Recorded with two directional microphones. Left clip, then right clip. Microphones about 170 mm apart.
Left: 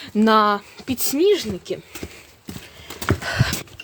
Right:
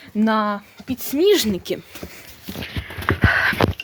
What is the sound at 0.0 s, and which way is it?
Speech, 20° left (ahead or behind).